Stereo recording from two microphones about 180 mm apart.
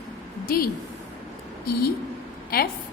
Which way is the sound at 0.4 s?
55° left (ahead or behind).